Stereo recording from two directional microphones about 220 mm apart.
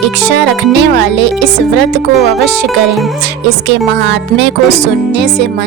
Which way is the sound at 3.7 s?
55° right (ahead or behind).